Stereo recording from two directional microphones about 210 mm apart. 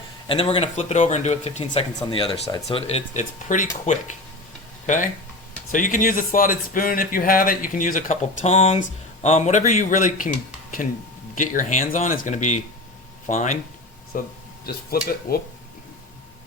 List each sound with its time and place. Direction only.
0.3 s speech: 25° left (ahead or behind)
5.7 s speech: 40° left (ahead or behind)